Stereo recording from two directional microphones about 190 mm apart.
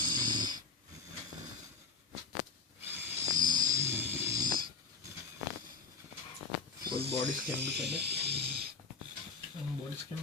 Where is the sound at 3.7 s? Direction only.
10° right (ahead or behind).